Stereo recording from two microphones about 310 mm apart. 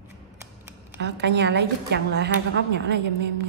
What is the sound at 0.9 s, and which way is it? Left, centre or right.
A woman's voice, right.